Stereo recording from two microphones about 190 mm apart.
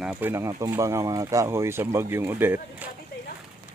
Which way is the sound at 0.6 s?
15° right (ahead or behind).